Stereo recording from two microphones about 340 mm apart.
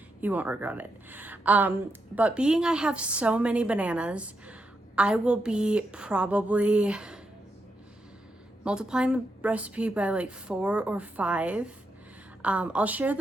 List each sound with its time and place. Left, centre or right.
0.2 s a woman's voice: centre
8.6 s a woman's voice: centre